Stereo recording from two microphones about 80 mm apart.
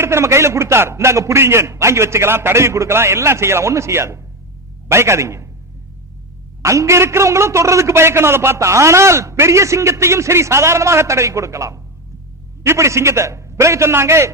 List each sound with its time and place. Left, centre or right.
0.0 s a man's voice: right
6.6 s a man's voice: right